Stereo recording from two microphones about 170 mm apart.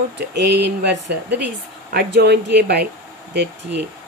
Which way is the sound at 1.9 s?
70° right (ahead or behind).